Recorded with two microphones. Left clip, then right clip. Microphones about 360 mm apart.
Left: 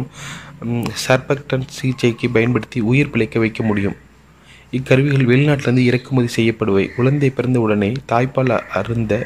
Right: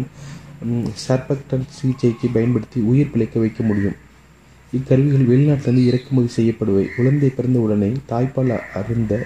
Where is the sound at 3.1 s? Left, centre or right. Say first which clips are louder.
Left 3 dB; left.